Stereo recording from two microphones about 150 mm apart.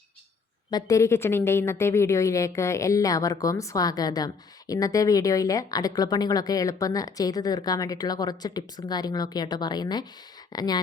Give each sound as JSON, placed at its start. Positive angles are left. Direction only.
{"t": 0.7, "sound": "a woman's voice", "side_deg": 25}